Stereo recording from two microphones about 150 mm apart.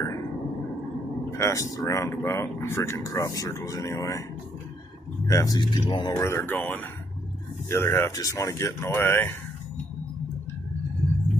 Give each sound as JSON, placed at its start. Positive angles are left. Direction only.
{"t": 1.3, "sound": "speech", "side_deg": 20}
{"t": 5.2, "sound": "speech", "side_deg": 20}
{"t": 6.2, "sound": "speech", "side_deg": 15}